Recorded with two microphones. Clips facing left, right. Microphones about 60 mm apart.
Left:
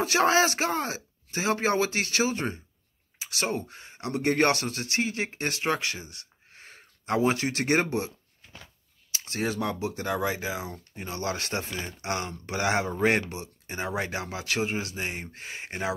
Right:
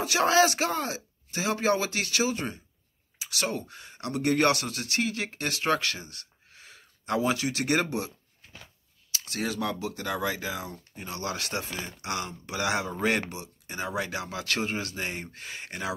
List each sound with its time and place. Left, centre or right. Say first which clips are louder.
0.0 s speech: even; left
5.7 s speech: right 4 dB; centre
6.5 s speech: left 2 dB; left
9.1 s speech: left 2 dB; left
14.4 s speech: left 1 dB; centre
15.3 s speech: left 2 dB; left